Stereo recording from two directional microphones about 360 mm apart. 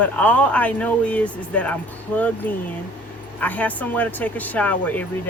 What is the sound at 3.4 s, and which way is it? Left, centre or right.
Speech, centre.